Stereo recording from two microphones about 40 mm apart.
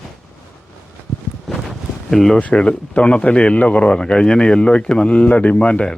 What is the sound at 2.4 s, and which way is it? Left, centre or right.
Speech, left.